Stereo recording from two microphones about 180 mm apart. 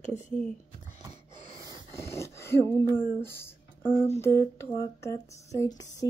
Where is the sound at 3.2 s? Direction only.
15° left (ahead or behind).